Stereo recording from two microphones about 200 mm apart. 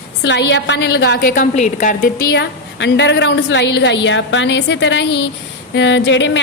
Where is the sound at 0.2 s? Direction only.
60° left (ahead or behind); by 2.2 s 40° left (ahead or behind).